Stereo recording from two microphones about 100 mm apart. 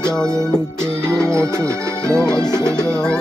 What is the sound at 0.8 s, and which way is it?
Music, 30° right (ahead or behind).